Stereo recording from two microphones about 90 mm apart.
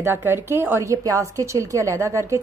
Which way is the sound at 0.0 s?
25° right (ahead or behind).